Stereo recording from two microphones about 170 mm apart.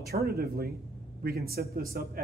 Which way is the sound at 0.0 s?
65° right (ahead or behind).